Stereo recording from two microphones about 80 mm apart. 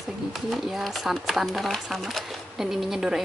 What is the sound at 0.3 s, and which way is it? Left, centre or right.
Speech, centre.